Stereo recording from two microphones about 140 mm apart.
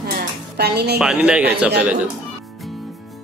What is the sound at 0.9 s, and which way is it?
A man's voice, 10° right (ahead or behind).